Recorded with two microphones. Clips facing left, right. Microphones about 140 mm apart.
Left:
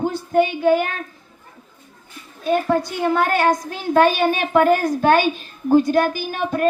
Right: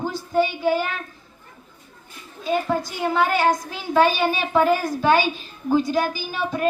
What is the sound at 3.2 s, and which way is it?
A woman's voice, 55° left (ahead or behind).